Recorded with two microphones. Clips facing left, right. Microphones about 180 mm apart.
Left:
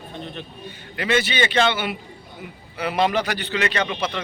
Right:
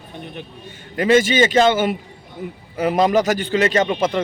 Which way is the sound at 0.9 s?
45° right (ahead or behind).